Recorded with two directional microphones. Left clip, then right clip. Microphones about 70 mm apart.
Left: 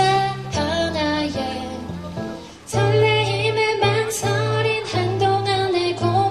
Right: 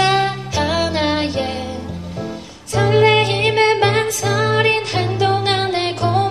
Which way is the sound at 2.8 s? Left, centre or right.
Right.